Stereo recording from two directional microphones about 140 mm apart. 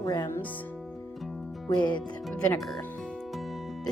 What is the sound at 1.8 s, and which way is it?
Speech, 30° left (ahead or behind).